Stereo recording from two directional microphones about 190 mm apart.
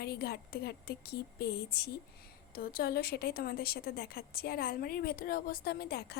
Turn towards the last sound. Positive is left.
turn(degrees=60)  # may be behind; listen again after turning